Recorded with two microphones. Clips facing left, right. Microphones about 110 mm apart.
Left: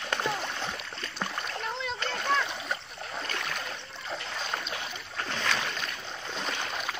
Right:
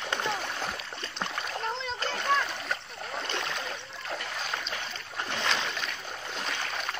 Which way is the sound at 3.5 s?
Centre (ahead or behind).